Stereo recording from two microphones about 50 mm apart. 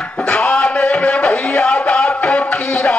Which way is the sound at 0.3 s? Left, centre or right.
Left.